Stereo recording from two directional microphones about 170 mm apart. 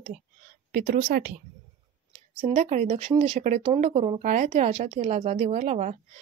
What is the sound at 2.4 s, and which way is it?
Speech, 40° right (ahead or behind).